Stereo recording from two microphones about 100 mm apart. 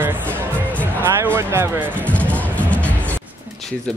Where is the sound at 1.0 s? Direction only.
20° right (ahead or behind).